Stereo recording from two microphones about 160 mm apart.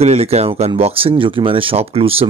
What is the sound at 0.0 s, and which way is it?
Speech, 40° right (ahead or behind).